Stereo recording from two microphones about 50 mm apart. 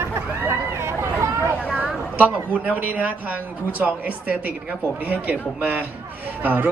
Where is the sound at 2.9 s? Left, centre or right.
Right.